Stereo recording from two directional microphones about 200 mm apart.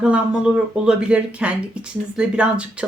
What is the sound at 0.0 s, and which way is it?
Speech, 5° right (ahead or behind).